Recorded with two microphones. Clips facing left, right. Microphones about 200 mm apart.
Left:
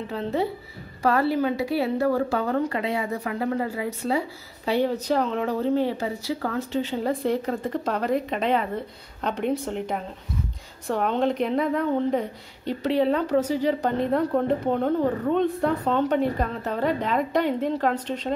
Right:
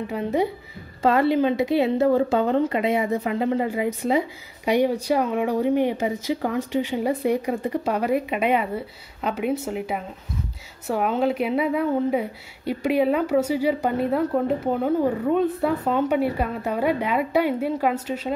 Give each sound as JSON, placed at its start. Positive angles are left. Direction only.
{"t": 0.0, "sound": "speech", "side_deg": -15}